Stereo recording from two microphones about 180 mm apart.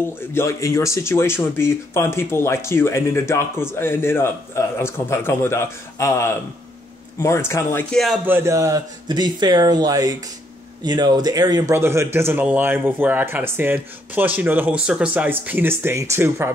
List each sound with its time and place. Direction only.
0.3 s speech: 15° left (ahead or behind)
8.3 s a man's voice: 15° right (ahead or behind)